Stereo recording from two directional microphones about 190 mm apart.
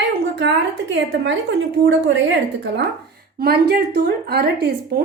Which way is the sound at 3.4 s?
55° right (ahead or behind).